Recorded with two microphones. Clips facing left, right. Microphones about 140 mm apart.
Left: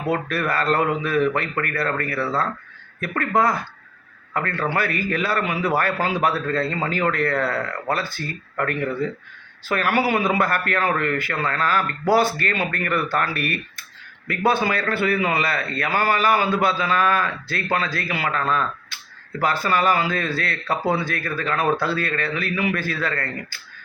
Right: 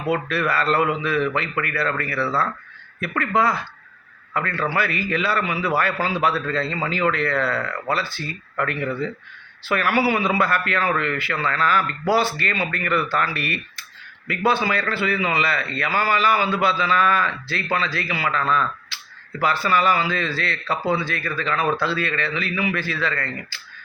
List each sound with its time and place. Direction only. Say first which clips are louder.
0.3 s a man's voice: even; 45° left (ahead or behind)
2.1 s speech: right 2 dB; 20° left (ahead or behind)
3.0 s a man's voice: even; 45° left (ahead or behind)